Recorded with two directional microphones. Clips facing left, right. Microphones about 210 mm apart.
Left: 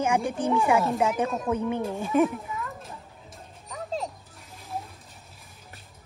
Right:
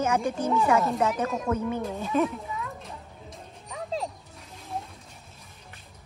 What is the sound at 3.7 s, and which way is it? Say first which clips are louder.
Music: even; centre (ahead or behind).